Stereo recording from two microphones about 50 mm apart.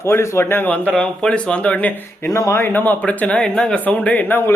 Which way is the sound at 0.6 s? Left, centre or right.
Left.